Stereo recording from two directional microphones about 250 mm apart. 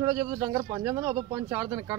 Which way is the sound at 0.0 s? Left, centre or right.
Centre.